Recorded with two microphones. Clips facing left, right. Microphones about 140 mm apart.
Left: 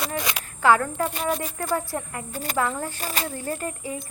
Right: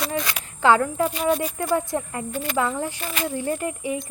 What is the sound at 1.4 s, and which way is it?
Speech, 15° right (ahead or behind).